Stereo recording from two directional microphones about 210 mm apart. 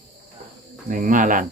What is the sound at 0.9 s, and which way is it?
Speech, 40° right (ahead or behind).